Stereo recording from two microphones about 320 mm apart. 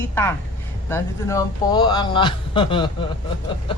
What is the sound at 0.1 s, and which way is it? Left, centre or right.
Speech, centre.